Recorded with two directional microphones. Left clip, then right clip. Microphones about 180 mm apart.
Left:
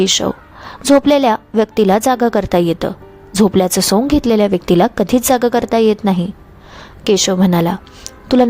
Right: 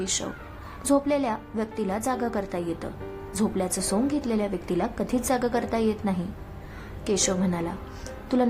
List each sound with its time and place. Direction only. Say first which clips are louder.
0.0 s a woman's voice: left 16 dB; 45° left (ahead or behind)